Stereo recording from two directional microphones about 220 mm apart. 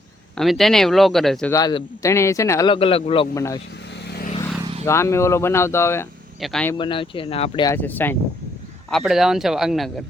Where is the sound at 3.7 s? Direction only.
50° left (ahead or behind).